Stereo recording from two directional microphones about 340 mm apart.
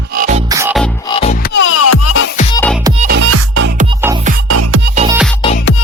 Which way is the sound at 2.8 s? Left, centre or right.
Centre.